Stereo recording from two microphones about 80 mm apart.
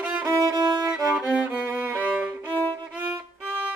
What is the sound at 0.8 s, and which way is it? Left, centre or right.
Music, centre.